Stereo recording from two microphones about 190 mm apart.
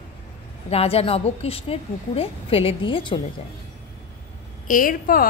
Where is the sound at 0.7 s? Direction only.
30° left (ahead or behind).